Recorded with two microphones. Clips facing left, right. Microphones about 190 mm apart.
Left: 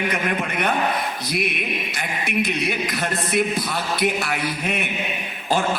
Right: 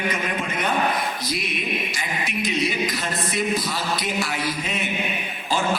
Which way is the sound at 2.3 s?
60° left (ahead or behind).